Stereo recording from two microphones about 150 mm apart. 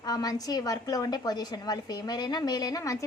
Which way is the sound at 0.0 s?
25° left (ahead or behind).